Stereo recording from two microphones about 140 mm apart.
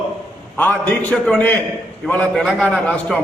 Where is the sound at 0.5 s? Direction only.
10° left (ahead or behind).